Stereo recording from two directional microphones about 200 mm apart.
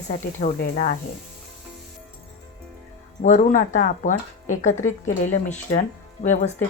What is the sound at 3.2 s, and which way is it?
Speech, 40° left (ahead or behind).